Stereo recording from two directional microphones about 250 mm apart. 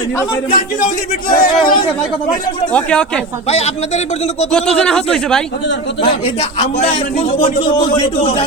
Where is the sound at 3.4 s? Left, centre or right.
Left.